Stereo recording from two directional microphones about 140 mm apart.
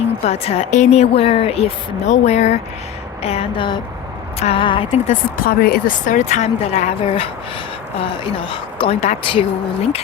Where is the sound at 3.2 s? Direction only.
40° left (ahead or behind).